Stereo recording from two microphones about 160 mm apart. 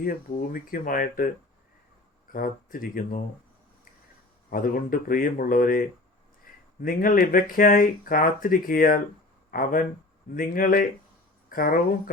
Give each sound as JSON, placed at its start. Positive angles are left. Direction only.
{"t": 0.0, "sound": "speech", "side_deg": 65}
{"t": 2.3, "sound": "speech", "side_deg": 60}
{"t": 4.5, "sound": "speech", "side_deg": 60}
{"t": 6.8, "sound": "speech", "side_deg": 60}